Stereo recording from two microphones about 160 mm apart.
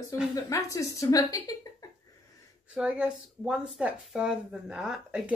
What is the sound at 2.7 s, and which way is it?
Speech, 5° right (ahead or behind).